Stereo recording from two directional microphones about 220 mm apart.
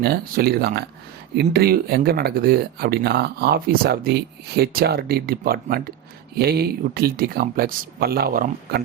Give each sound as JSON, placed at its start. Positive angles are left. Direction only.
{"t": 0.0, "sound": "speech", "side_deg": -45}